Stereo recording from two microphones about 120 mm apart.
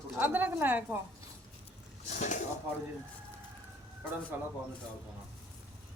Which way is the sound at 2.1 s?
90° left.